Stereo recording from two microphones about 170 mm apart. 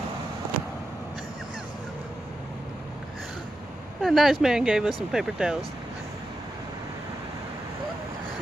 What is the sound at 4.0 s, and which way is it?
Speech, centre (ahead or behind).